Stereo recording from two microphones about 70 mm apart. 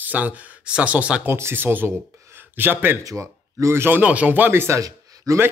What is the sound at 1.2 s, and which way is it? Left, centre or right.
Speech, right.